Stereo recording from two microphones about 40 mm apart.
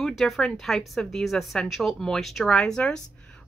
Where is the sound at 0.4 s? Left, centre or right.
Centre.